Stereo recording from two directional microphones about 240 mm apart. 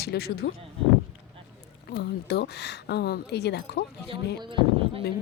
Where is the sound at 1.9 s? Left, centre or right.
Left.